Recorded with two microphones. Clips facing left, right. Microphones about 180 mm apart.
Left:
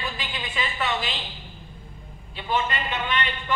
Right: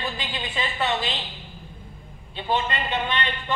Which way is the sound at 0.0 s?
30° right (ahead or behind).